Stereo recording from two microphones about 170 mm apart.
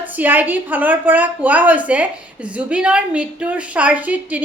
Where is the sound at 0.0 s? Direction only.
10° right (ahead or behind).